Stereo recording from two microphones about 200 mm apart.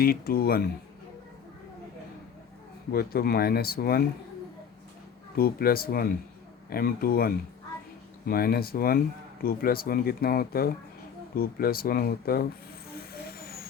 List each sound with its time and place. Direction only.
0.0 s speech: 50° left (ahead or behind)
2.9 s speech: 50° left (ahead or behind)
5.4 s speech: 50° left (ahead or behind)
13.2 s vehicle: 50° left (ahead or behind)